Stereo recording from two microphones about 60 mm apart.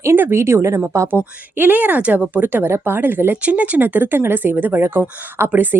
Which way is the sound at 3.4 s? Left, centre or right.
Right.